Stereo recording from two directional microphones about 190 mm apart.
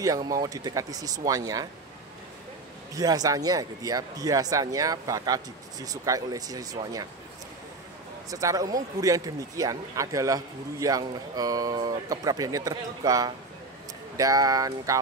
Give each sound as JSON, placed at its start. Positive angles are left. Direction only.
{"t": 0.0, "sound": "speech", "side_deg": -20}
{"t": 2.9, "sound": "speech", "side_deg": -20}
{"t": 8.3, "sound": "a man's voice", "side_deg": -15}